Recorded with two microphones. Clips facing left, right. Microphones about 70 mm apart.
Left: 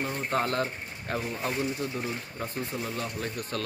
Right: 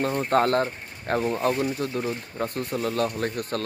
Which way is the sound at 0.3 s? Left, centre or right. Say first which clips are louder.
Right 6 dB; right.